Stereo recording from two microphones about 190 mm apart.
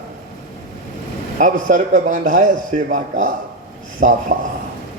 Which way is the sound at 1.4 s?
40° right (ahead or behind).